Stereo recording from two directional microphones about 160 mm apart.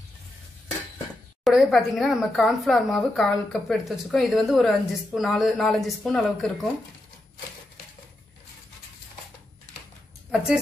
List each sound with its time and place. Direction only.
1.4 s a woman's voice: centre (ahead or behind)
10.3 s speech: 5° right (ahead or behind)